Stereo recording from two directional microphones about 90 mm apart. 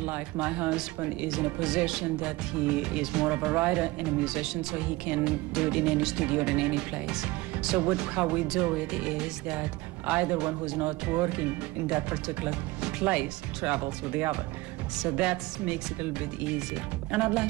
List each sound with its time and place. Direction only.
0.0 s speech: 15° right (ahead or behind)